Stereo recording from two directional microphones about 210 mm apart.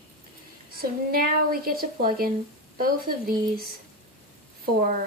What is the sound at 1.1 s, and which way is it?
Speech, 45° right (ahead or behind).